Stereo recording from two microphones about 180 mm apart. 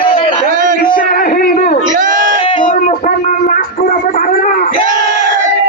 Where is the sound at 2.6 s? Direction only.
45° left (ahead or behind).